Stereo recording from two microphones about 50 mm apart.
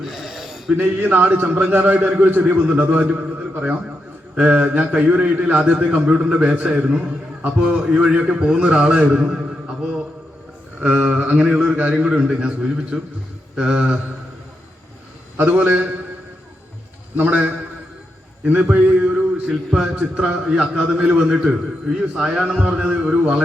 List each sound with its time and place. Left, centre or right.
0.0 s a sound: centre
0.8 s a man's voice: right
1.5 s a man's voice: right
8.3 s a man's voice: centre
10.8 s a sound: right
11.1 s a man's voice: right
12.1 s a man's voice: centre
15.4 s a man's voice: right
17.2 s a man's voice: right
18.8 s a sound: right
19.8 s a man's voice: centre